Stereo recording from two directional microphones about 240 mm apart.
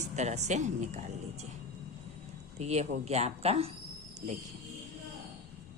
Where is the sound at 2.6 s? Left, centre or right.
Right.